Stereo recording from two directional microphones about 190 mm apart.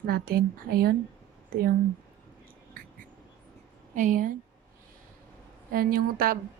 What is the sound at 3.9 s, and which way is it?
Speech, 45° right (ahead or behind).